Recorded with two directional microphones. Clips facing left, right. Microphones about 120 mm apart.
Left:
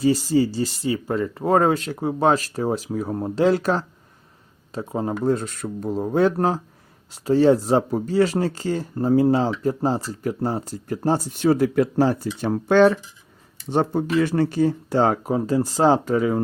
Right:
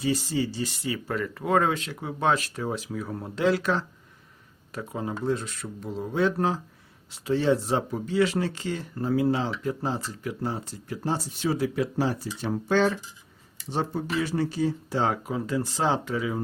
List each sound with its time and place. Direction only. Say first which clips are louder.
0.0 s speech: left 8 dB; 35° left (ahead or behind)
4.7 s speech: left 7 dB; 30° left (ahead or behind)
5.0 s speech: left 6 dB; 45° left (ahead or behind)